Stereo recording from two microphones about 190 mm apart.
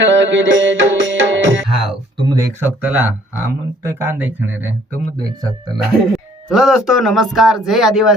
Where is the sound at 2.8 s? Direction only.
10° right (ahead or behind).